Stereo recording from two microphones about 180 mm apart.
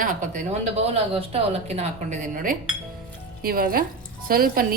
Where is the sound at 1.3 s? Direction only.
35° right (ahead or behind).